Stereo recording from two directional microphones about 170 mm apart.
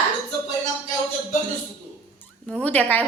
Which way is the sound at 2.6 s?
10° left (ahead or behind).